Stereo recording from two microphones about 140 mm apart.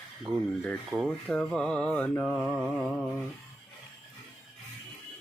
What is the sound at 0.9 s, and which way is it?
Speech, centre (ahead or behind).